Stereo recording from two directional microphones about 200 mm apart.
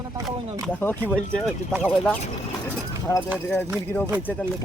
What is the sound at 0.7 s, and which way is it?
Speech, 10° left (ahead or behind).